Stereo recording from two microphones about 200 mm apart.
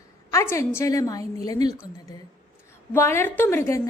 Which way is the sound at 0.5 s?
15° left (ahead or behind).